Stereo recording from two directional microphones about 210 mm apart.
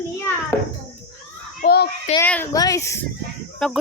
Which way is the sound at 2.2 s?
10° left (ahead or behind).